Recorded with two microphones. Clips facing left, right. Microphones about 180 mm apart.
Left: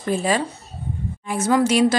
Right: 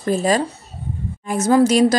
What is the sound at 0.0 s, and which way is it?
Speech, 40° right (ahead or behind).